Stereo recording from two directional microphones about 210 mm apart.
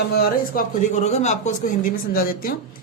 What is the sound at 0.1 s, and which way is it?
Speech, 45° left (ahead or behind).